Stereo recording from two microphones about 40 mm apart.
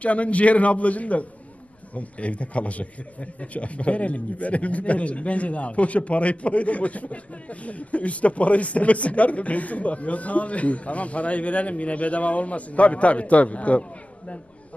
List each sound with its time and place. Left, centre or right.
0.0 s a man's voice: left